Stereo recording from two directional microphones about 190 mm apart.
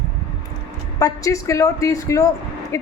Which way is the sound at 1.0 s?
20° left (ahead or behind).